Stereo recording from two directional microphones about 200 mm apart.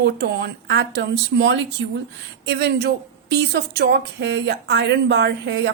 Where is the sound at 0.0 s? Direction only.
60° right (ahead or behind).